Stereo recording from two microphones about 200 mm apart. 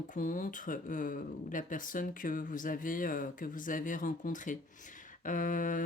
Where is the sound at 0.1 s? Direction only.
40° left (ahead or behind).